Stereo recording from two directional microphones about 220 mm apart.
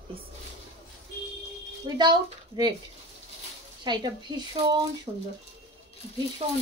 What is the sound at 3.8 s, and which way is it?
A woman's voice, 20° right (ahead or behind).